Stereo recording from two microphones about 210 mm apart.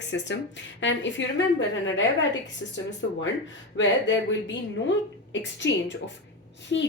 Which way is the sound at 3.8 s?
60° left (ahead or behind).